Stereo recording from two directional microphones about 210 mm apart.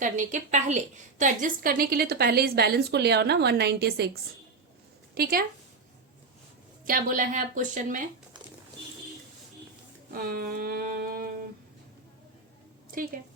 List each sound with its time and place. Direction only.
0.0 s a woman's voice: 35° right (ahead or behind)
6.8 s a woman's voice: 40° right (ahead or behind)
10.1 s a sound: 45° right (ahead or behind)